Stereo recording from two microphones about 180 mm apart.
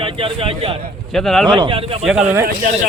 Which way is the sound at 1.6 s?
30° right (ahead or behind).